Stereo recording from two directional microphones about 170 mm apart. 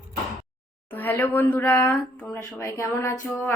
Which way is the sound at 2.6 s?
15° left (ahead or behind).